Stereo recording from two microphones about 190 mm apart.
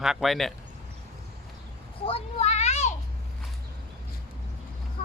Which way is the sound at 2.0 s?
30° left (ahead or behind).